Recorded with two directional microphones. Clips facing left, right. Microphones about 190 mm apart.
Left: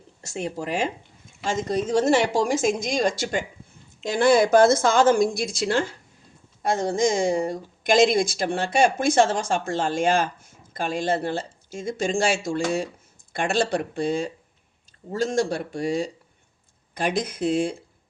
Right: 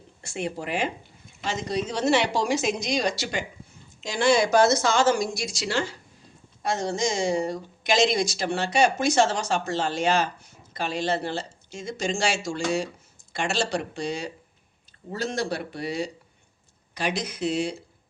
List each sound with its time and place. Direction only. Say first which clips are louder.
0.2 s speech: left 1 dB; 40° left (ahead or behind)